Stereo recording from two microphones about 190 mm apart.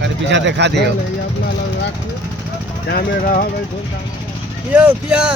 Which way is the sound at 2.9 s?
45° left (ahead or behind).